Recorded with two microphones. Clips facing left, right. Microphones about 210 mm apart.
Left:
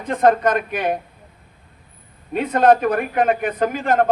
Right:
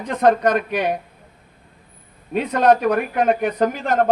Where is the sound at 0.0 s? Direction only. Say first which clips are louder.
Even; 50° left (ahead or behind).